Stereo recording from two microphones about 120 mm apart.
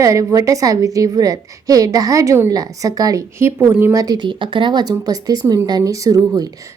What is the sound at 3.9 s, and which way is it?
A woman's voice, 30° right (ahead or behind).